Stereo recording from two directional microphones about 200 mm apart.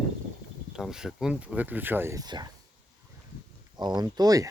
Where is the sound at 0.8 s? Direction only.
5° right (ahead or behind); by 2.5 s 20° right (ahead or behind).